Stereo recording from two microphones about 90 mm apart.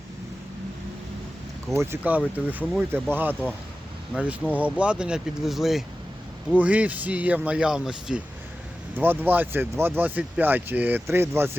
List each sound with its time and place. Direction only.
1.7 s speech: 30° right (ahead or behind)
2.0 s speech: 20° right (ahead or behind)
4.5 s speech: 15° right (ahead or behind)
6.6 s speech: 15° right (ahead or behind)
9.0 s speech: 20° right (ahead or behind)